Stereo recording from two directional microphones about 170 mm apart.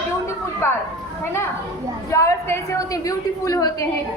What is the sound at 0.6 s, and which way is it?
Speech, 15° left (ahead or behind).